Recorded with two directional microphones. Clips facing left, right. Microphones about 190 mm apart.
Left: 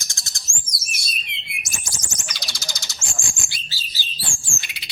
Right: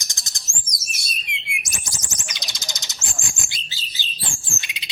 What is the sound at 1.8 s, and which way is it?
Bird, 20° right (ahead or behind).